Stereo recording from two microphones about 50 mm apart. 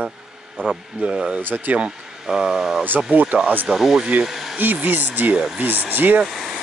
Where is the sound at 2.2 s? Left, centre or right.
Centre.